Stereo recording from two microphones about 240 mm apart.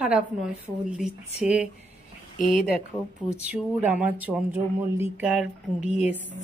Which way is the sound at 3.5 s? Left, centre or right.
Centre.